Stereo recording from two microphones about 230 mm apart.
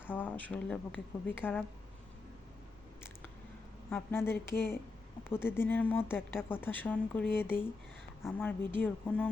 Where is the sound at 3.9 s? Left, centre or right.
Centre.